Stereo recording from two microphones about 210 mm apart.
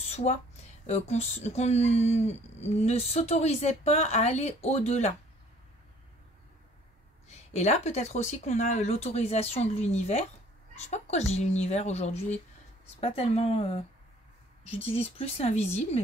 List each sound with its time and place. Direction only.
0.1 s speech: 30° left (ahead or behind)
7.2 s speech: 35° left (ahead or behind)